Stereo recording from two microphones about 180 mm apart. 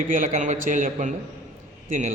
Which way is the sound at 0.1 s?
45° right (ahead or behind).